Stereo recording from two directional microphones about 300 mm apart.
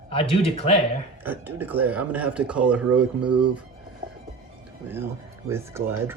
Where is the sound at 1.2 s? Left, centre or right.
Centre.